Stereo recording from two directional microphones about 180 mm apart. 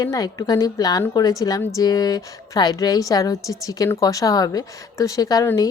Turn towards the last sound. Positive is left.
turn(degrees=20)  # may be behind; listen again after turning